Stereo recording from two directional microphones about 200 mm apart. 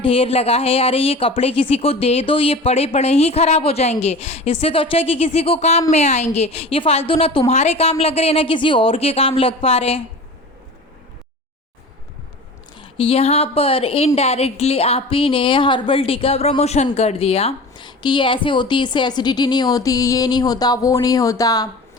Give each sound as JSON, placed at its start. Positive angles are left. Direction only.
{"t": 0.0, "sound": "speech", "side_deg": 25}
{"t": 12.7, "sound": "speech", "side_deg": 25}